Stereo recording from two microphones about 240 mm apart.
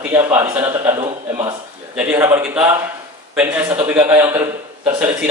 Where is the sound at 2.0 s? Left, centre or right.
Centre.